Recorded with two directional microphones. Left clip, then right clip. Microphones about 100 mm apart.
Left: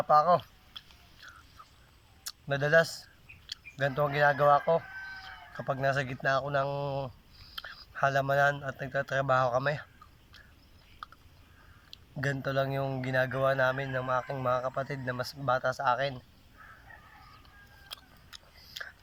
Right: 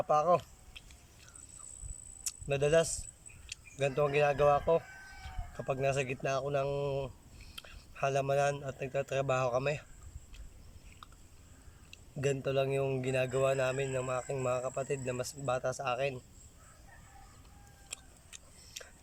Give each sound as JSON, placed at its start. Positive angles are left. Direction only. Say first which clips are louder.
{"t": 0.1, "sound": "speech", "louder": "left 5 dB", "side_deg": -30}
{"t": 2.2, "sound": "speech", "louder": "left 1 dB", "side_deg": -30}
{"t": 11.9, "sound": "a man's voice", "louder": "even", "side_deg": -25}
{"t": 17.8, "sound": "tick-tock", "louder": "left 3 dB", "side_deg": -30}